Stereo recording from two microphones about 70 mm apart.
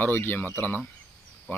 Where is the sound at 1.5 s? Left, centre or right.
Left.